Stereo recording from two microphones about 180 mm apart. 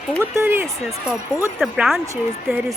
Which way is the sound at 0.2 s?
15° right (ahead or behind).